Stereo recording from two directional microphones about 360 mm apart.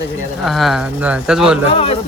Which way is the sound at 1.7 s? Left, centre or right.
Centre.